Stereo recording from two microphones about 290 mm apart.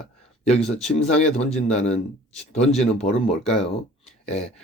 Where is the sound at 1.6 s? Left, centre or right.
Left.